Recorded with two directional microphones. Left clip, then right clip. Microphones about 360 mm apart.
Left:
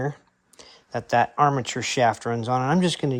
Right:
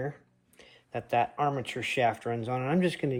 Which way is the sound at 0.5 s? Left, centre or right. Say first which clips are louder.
Left 6 dB; centre.